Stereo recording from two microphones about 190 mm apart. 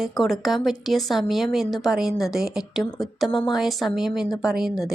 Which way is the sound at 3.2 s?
25° left (ahead or behind).